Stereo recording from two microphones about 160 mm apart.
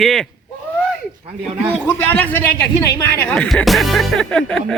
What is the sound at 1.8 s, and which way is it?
A man's voice, 15° left (ahead or behind).